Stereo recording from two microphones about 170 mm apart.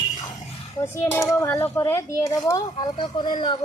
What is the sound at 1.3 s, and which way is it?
Speech, 15° left (ahead or behind).